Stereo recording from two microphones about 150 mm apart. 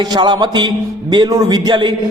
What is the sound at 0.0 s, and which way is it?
A man's voice, 30° right (ahead or behind).